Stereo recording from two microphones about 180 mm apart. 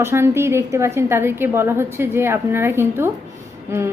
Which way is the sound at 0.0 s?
15° right (ahead or behind).